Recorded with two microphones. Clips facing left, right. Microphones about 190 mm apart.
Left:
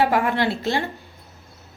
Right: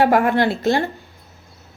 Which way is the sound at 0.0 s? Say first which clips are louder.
Right 4 dB; 50° right (ahead or behind).